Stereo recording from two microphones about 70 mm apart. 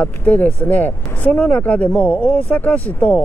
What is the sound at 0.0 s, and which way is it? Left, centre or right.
Speech, left.